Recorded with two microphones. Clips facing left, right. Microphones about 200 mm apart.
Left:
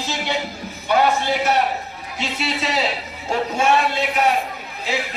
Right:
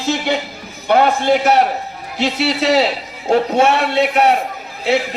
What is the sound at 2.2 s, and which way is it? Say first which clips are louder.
A man's voice: right 8 dB; 70° right (ahead or behind).